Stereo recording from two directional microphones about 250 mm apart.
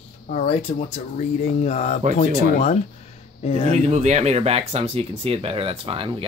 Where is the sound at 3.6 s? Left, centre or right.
Right.